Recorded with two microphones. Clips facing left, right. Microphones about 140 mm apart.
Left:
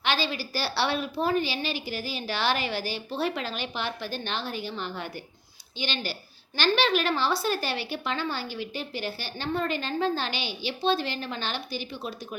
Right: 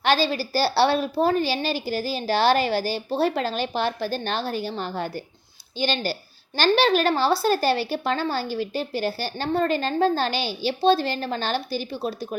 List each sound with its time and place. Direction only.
0.0 s speech: 40° right (ahead or behind)